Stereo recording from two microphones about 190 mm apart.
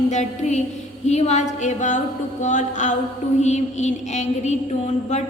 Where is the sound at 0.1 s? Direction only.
40° left (ahead or behind).